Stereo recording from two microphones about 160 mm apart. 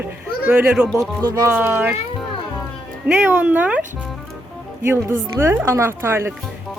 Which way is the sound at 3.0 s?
10° right (ahead or behind).